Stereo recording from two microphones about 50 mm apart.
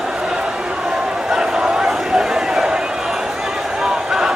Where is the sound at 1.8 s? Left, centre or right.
Centre.